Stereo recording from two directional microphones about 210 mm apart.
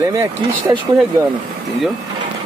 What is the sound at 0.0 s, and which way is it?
Speech, 15° right (ahead or behind).